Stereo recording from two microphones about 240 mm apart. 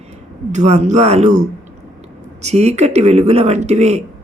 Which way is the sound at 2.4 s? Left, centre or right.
Right.